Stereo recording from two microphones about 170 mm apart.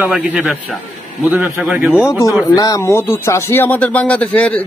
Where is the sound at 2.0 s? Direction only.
15° left (ahead or behind).